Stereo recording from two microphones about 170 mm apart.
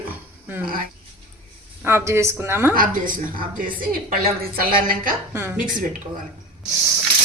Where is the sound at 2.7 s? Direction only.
55° right (ahead or behind).